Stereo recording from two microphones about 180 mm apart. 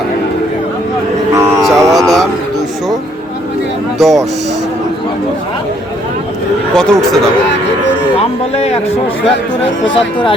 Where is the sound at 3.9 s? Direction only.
Centre (ahead or behind).